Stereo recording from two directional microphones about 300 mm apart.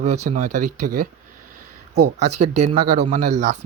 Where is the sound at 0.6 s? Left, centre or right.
Right.